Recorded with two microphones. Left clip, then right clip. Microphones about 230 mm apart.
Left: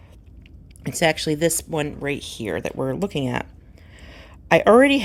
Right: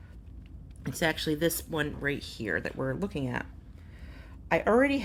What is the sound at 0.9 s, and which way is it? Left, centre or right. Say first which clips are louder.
A woman's voice: left 9 dB; left.